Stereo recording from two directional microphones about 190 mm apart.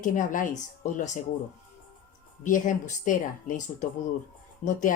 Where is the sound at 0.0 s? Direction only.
45° left (ahead or behind).